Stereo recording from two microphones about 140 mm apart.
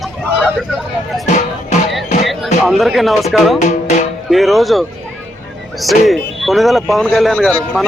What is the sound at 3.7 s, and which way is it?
Music, 55° left (ahead or behind).